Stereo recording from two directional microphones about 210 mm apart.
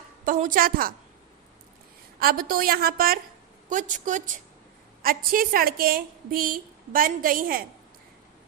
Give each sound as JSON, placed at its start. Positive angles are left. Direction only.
{"t": 0.3, "sound": "a woman's voice", "side_deg": -40}
{"t": 2.1, "sound": "a woman's voice", "side_deg": -45}